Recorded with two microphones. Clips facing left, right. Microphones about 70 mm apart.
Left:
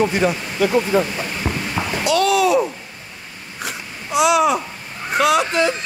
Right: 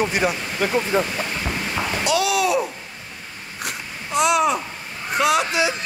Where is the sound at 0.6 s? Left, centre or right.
Right.